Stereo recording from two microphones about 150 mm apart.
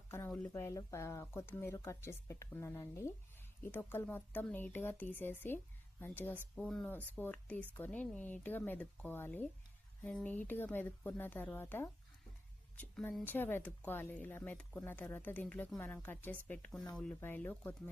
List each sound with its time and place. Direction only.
0.1 s speech: 15° left (ahead or behind)